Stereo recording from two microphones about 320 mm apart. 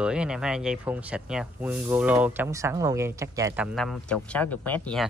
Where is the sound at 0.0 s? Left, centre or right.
Centre.